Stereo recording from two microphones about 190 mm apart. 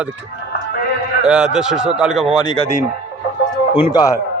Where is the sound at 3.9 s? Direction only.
20° left (ahead or behind).